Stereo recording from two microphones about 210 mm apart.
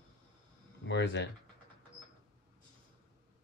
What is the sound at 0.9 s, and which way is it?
Speech, 55° left (ahead or behind).